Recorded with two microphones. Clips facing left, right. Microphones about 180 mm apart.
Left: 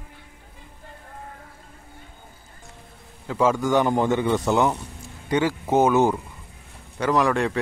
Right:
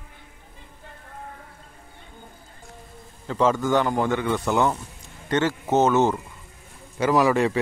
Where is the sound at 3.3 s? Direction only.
10° left (ahead or behind).